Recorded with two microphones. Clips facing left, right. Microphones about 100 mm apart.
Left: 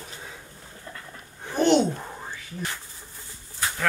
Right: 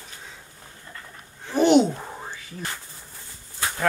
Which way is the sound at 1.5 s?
10° right (ahead or behind).